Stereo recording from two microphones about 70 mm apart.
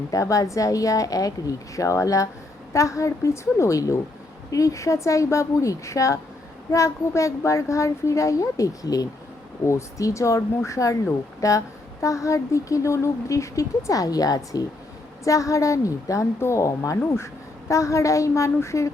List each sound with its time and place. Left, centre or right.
0.1 s speech: left
9.6 s speech: left